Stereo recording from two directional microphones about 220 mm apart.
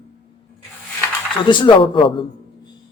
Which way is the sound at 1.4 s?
20° left (ahead or behind).